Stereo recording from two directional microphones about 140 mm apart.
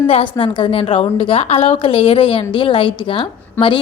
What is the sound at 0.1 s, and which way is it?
A woman's voice, 40° left (ahead or behind).